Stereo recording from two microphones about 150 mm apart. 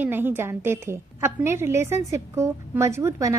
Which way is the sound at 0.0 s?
15° right (ahead or behind).